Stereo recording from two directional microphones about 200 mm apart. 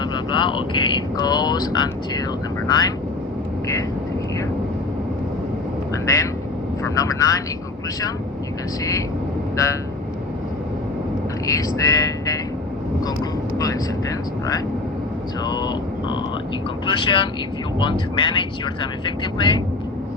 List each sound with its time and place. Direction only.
0.0 s speech: 25° left (ahead or behind)
5.9 s speech: 15° left (ahead or behind)
8.8 s speech: 15° left (ahead or behind)
11.4 s speech: 15° left (ahead or behind)
13.6 s speech: 15° left (ahead or behind)
15.4 s speech: 20° left (ahead or behind)